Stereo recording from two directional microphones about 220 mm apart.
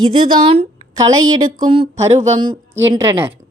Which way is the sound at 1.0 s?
15° right (ahead or behind).